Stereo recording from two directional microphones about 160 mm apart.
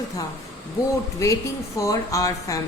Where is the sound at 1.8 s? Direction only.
20° left (ahead or behind).